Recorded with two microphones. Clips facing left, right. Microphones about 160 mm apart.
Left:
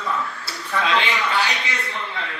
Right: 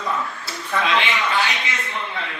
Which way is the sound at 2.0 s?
20° right (ahead or behind).